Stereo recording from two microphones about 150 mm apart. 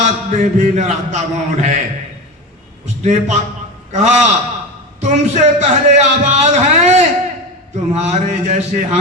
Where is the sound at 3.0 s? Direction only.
55° right (ahead or behind).